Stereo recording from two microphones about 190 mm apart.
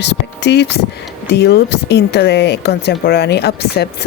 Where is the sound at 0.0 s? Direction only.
65° left (ahead or behind).